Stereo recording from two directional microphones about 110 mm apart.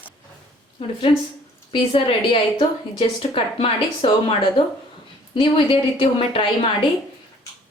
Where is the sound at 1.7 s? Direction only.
55° left (ahead or behind).